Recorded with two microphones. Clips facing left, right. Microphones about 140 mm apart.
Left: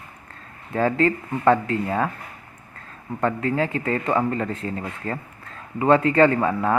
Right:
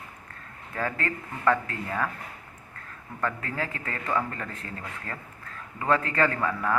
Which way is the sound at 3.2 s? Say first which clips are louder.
Left 8 dB; 25° left (ahead or behind).